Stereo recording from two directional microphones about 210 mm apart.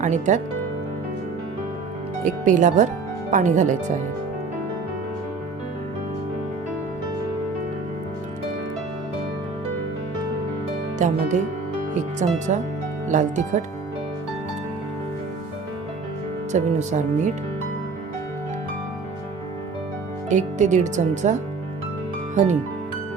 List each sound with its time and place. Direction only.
0.0 s speech: 35° right (ahead or behind)
2.2 s speech: 35° right (ahead or behind)
10.9 s speech: 35° right (ahead or behind)
16.5 s speech: 35° right (ahead or behind)
20.3 s speech: 35° right (ahead or behind)